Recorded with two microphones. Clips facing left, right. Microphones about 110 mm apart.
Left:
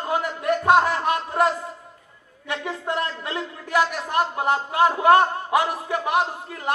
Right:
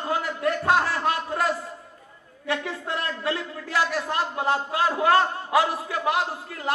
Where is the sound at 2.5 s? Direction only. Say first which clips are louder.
Left 1 dB; 25° left (ahead or behind).